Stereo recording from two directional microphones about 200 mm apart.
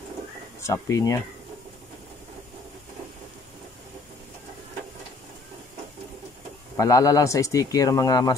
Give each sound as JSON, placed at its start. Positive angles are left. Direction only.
{"t": 0.6, "sound": "speech", "side_deg": 15}
{"t": 6.8, "sound": "speech", "side_deg": 15}